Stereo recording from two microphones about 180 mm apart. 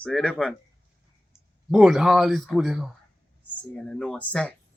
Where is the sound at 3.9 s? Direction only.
5° left (ahead or behind).